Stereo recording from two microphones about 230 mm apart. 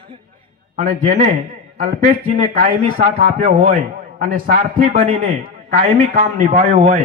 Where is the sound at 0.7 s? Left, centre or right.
Right.